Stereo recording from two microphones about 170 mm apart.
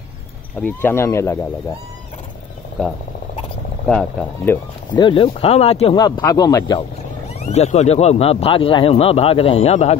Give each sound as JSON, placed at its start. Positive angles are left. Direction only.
{"t": 0.6, "sound": "speech", "side_deg": 10}
{"t": 3.8, "sound": "speech", "side_deg": 10}
{"t": 4.9, "sound": "speech", "side_deg": 30}
{"t": 7.3, "sound": "speech", "side_deg": 40}